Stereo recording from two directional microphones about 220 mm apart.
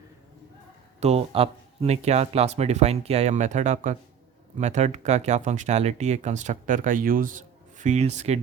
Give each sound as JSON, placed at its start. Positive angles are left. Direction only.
{"t": 0.9, "sound": "speech", "side_deg": -30}